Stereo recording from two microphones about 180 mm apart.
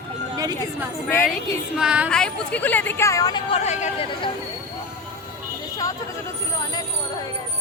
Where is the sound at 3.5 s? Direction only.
40° left (ahead or behind).